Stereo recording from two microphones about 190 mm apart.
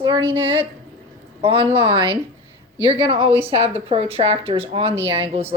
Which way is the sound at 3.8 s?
30° right (ahead or behind).